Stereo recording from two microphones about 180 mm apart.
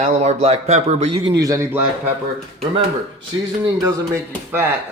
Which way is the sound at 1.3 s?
20° right (ahead or behind).